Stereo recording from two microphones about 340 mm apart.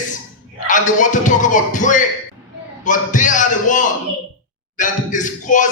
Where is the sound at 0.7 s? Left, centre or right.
Left.